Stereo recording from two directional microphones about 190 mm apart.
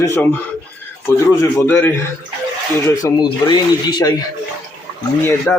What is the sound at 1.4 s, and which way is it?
A man's voice, 15° left (ahead or behind).